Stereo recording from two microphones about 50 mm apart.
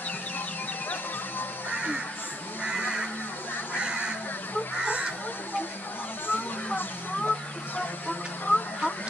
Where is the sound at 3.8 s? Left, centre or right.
Centre.